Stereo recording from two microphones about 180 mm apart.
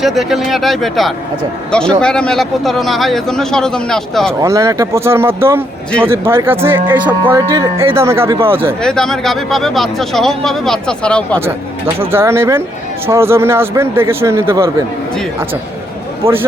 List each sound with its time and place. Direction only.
0.0 s speech: centre (ahead or behind)
4.4 s a man's voice: 15° right (ahead or behind)
8.8 s speech: 5° left (ahead or behind)
11.9 s a man's voice: 15° right (ahead or behind)
16.2 s a man's voice: 10° right (ahead or behind)